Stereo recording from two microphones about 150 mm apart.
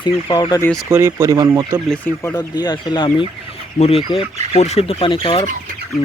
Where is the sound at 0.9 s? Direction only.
15° right (ahead or behind).